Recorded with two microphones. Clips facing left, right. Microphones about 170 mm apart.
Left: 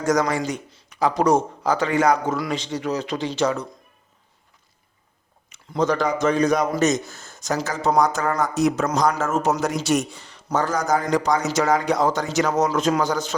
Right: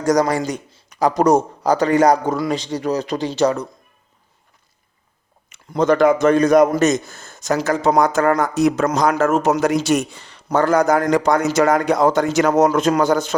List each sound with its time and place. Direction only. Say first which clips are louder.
0.0 s a man's voice: right 4 dB; 35° right (ahead or behind)
5.5 s a man's voice: right 5 dB; 55° right (ahead or behind)